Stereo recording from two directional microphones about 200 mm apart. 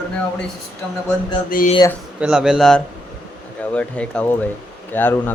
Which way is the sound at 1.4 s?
45° left (ahead or behind).